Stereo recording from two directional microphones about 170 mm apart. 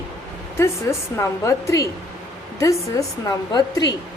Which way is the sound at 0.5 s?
15° left (ahead or behind).